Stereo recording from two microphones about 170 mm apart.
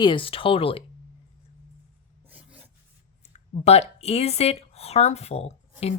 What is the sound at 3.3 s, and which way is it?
Speech, 40° left (ahead or behind).